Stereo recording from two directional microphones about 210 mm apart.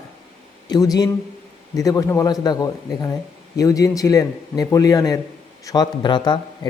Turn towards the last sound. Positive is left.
turn(degrees=20)  # may be behind; listen again after turning